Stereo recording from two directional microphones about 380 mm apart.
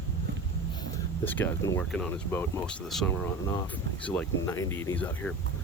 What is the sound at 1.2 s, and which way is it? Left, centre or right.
Speech, centre.